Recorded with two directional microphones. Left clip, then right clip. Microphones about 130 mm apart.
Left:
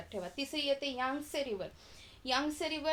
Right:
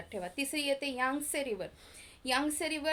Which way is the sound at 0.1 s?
40° right (ahead or behind).